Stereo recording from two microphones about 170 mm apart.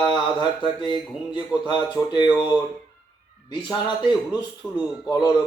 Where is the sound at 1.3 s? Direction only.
25° left (ahead or behind).